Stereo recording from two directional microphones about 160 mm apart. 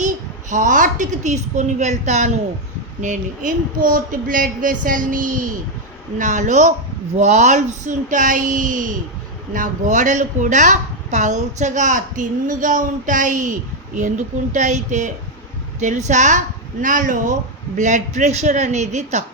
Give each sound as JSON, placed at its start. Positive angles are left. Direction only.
{"t": 0.5, "sound": "a woman's voice", "side_deg": -55}